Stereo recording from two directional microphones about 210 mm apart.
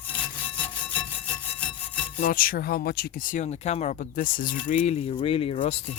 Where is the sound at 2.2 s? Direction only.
45° left (ahead or behind); by 5.8 s 30° left (ahead or behind).